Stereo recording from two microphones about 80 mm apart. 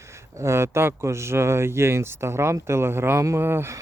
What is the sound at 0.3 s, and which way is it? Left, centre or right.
Speech, right.